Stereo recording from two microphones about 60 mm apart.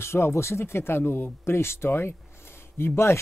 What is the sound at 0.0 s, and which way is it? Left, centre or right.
Speech, left.